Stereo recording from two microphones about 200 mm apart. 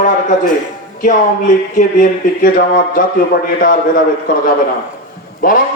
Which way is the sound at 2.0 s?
45° left (ahead or behind).